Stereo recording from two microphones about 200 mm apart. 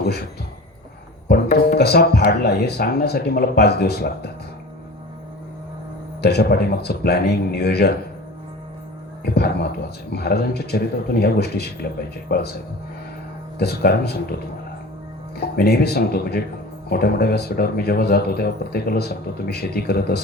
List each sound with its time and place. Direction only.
0.0 s speech: 50° left (ahead or behind)
1.5 s speech: 55° left (ahead or behind)
6.2 s speech: 55° left (ahead or behind)
9.2 s speech: 55° left (ahead or behind)
13.6 s speech: 55° left (ahead or behind)
15.4 s speech: 50° left (ahead or behind)